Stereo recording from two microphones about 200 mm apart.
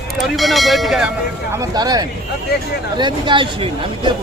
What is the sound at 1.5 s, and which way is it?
Speech, 20° right (ahead or behind).